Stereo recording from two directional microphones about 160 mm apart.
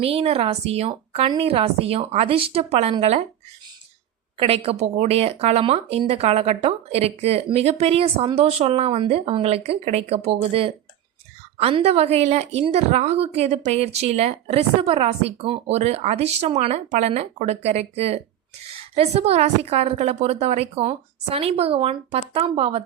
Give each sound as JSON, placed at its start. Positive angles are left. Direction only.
{"t": 0.0, "sound": "speech", "side_deg": -35}
{"t": 4.4, "sound": "speech", "side_deg": -35}